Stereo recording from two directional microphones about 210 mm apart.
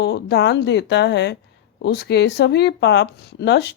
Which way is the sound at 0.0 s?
50° left (ahead or behind).